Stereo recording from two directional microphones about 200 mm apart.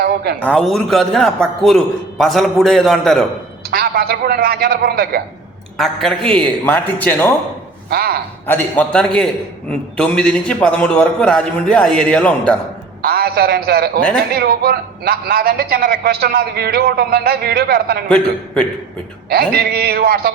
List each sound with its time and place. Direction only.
0.3 s a man's voice: 5° left (ahead or behind)
3.7 s a man's voice: 50° right (ahead or behind)
5.7 s a man's voice: centre (ahead or behind)
7.9 s a man's voice: 50° right (ahead or behind)
8.4 s a man's voice: 10° left (ahead or behind)
13.0 s a man's voice: 50° right (ahead or behind)
19.3 s a man's voice: 50° right (ahead or behind)